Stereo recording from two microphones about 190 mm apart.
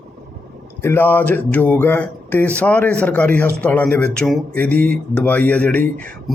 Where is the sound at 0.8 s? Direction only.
10° left (ahead or behind).